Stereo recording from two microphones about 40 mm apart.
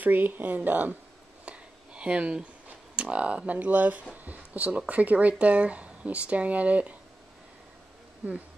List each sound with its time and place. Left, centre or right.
0.0 s speech: right
1.4 s a sound: right
3.0 s speech: right